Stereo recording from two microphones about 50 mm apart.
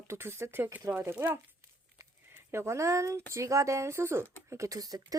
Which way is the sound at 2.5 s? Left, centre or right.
Right.